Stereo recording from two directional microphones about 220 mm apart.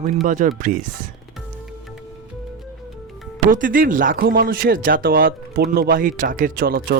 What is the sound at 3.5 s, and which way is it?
Speech, 40° right (ahead or behind).